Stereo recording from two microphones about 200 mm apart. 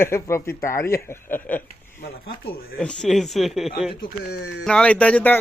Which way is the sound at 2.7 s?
5° left (ahead or behind).